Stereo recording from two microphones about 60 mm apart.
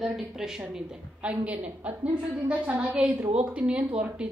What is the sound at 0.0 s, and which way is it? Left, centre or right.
A woman's voice, centre.